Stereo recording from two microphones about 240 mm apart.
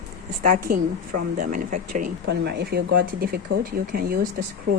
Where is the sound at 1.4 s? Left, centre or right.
Right.